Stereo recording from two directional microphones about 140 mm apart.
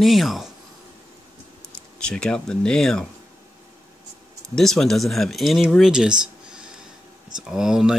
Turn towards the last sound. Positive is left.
turn(degrees=-5)  # may be behind; listen again after turning